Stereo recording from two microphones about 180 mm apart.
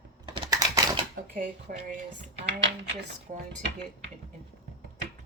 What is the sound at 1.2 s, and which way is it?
Speech, 45° right (ahead or behind).